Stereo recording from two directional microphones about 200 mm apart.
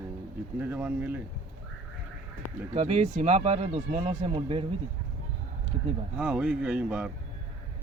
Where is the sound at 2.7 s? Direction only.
30° right (ahead or behind).